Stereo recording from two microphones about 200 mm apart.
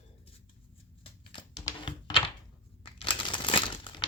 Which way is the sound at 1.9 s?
25° left (ahead or behind).